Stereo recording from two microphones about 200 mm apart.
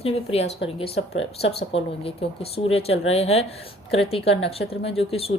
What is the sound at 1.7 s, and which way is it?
A woman's voice, 30° left (ahead or behind).